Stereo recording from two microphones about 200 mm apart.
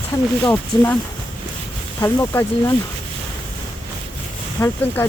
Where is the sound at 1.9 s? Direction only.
10° left (ahead or behind).